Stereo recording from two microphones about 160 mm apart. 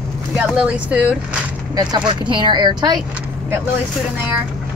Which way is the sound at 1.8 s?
25° right (ahead or behind).